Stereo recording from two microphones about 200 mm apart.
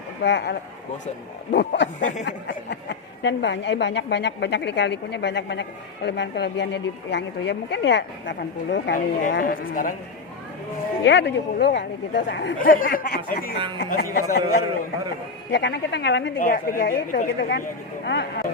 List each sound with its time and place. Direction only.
0.2 s a woman's voice: 60° left (ahead or behind)
2.0 s a sound: 40° left (ahead or behind)
2.2 s a woman's voice: 60° left (ahead or behind); by 9.9 s 45° left (ahead or behind)
11.0 s a woman's voice: 60° left (ahead or behind)
12.5 s speech: 45° left (ahead or behind)
15.5 s a woman's voice: 60° left (ahead or behind)
16.4 s speech: 45° left (ahead or behind)
18.0 s speech: 60° left (ahead or behind)